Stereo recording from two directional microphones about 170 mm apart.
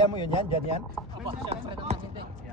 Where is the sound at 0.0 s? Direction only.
30° left (ahead or behind).